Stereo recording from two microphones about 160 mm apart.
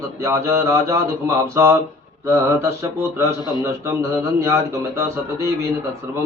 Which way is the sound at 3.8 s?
20° right (ahead or behind).